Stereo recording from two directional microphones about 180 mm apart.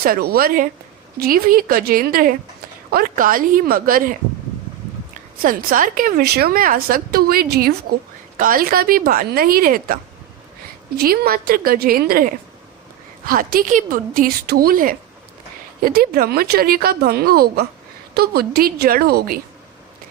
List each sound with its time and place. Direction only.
0.0 s a woman's voice: 55° right (ahead or behind)
5.4 s a woman's voice: 50° right (ahead or behind)